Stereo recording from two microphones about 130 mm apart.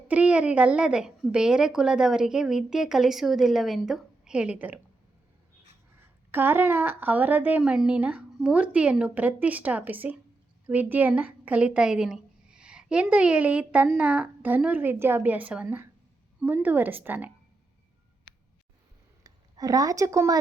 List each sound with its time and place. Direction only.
0.1 s a woman's voice: 10° right (ahead or behind)
6.3 s a woman's voice: 15° right (ahead or behind)
19.2 s a woman's voice: 30° right (ahead or behind)